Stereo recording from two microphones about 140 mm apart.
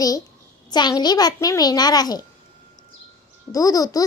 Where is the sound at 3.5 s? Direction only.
25° left (ahead or behind).